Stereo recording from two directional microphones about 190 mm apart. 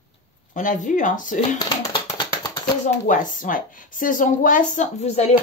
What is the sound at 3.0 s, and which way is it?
Speech, 45° left (ahead or behind).